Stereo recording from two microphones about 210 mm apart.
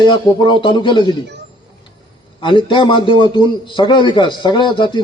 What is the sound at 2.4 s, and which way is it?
A man's voice, 25° left (ahead or behind).